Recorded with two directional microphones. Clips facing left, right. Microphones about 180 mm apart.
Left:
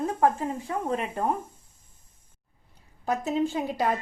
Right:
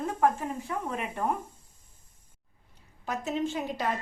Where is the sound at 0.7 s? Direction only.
30° left (ahead or behind).